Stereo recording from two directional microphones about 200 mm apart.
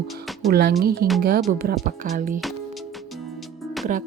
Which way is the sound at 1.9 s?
40° right (ahead or behind).